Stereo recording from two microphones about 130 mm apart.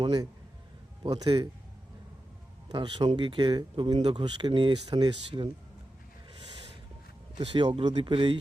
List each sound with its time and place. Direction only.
0.0 s speech: 35° right (ahead or behind)
2.6 s a man's voice: 35° right (ahead or behind)
7.3 s speech: 40° right (ahead or behind)